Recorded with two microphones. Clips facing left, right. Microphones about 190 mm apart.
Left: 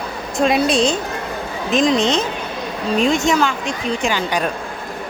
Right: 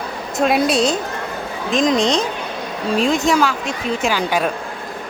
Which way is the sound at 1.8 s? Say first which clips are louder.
Even; 40° right (ahead or behind).